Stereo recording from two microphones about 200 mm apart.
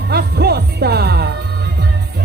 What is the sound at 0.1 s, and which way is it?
Music, 55° right (ahead or behind).